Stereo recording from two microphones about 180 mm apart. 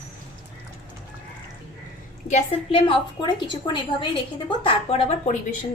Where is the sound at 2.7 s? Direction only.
30° left (ahead or behind).